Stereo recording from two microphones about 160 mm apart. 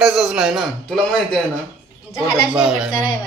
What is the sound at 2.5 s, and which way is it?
Speech, centre (ahead or behind).